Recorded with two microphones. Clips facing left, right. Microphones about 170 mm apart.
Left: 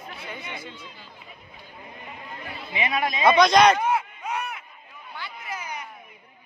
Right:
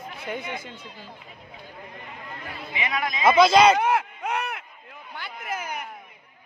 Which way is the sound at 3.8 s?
75° right (ahead or behind).